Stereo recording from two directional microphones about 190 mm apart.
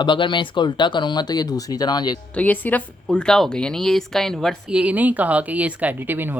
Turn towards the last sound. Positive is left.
turn(degrees=-10)  # may be behind; listen again after turning